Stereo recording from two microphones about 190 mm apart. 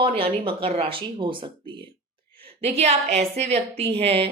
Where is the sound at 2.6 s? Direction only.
35° right (ahead or behind).